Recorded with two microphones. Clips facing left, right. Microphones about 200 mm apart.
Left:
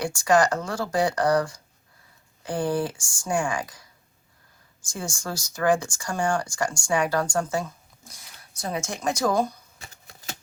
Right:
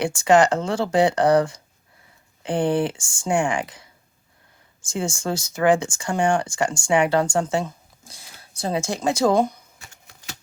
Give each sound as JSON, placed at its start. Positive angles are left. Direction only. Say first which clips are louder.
{"t": 0.0, "sound": "speech", "louder": "right 4 dB", "side_deg": -25}
{"t": 4.9, "sound": "speech", "louder": "right 7 dB", "side_deg": -25}
{"t": 9.8, "sound": "keys jangling", "louder": "left 2 dB", "side_deg": 40}